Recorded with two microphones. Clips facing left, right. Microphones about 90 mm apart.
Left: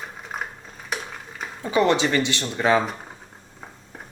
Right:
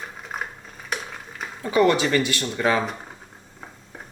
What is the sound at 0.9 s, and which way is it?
Stir, centre (ahead or behind).